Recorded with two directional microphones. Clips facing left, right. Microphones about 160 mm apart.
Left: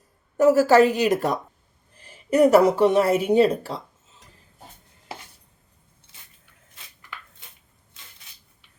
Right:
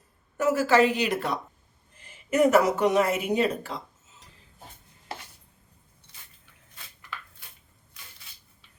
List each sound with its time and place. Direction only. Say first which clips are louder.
0.3 s a woman's voice: left 6 dB; 40° left (ahead or behind)
7.4 s chopping: left 2 dB; 20° left (ahead or behind)